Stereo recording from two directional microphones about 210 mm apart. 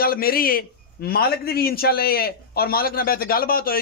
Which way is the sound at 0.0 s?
45° left (ahead or behind).